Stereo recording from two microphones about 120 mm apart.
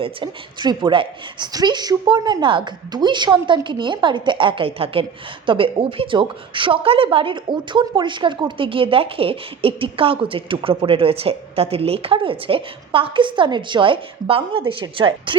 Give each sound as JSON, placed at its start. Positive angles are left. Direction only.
{"t": 0.0, "sound": "a woman's voice", "side_deg": -40}